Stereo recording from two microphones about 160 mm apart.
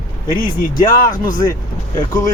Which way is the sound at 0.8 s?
20° left (ahead or behind).